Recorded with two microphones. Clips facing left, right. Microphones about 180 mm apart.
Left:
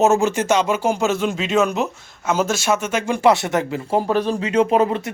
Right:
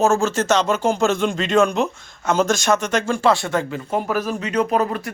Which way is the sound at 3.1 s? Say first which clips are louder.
Left 4 dB; 20° left (ahead or behind).